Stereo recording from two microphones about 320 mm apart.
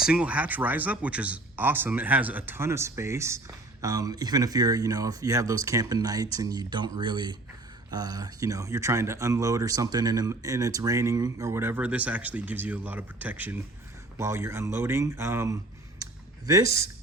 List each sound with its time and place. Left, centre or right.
0.1 s speech: centre
16.6 s speech: left